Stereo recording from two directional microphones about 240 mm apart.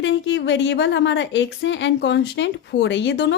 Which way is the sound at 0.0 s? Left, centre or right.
Left.